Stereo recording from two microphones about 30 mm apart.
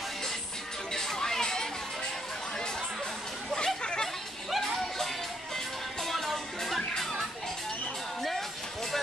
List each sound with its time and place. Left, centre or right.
1.0 s a sound: centre
3.5 s chatter: left
4.6 s music: centre
6.0 s music: centre
8.2 s music: centre